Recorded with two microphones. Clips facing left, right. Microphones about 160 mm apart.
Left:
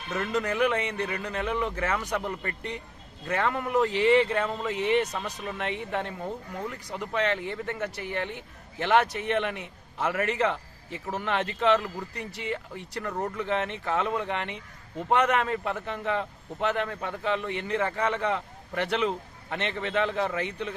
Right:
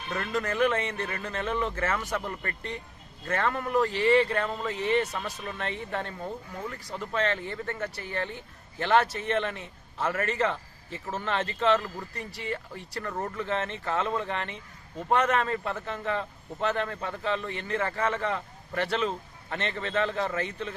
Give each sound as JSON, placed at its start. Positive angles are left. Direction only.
{"t": 0.2, "sound": "speech", "side_deg": 20}
{"t": 13.1, "sound": "speech", "side_deg": 0}
{"t": 13.3, "sound": "speech", "side_deg": 15}